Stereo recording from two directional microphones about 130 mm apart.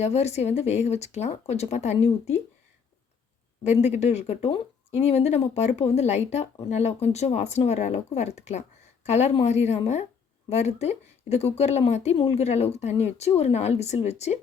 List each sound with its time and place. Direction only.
0.0 s speech: 55° left (ahead or behind)
3.6 s speech: 60° left (ahead or behind)
12.1 s a woman's voice: 40° left (ahead or behind)
12.4 s speech: 55° left (ahead or behind)